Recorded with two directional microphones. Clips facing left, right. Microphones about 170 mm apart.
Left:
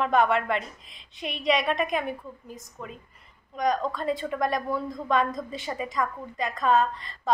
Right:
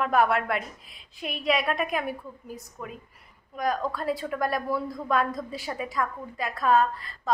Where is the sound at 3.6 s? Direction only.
5° right (ahead or behind).